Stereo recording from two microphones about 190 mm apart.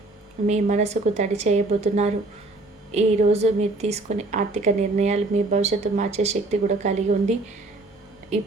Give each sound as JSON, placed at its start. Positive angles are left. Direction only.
{"t": 0.4, "sound": "a woman's voice", "side_deg": -35}